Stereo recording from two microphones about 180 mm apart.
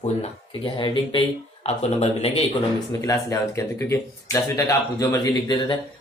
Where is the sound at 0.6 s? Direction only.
25° left (ahead or behind).